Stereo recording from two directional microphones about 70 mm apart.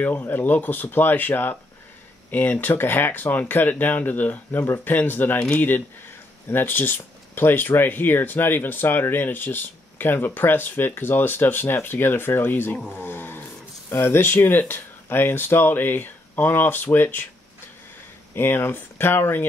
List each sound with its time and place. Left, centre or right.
0.0 s speech: left
18.3 s speech: left